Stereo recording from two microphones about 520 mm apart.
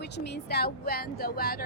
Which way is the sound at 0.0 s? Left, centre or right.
Centre.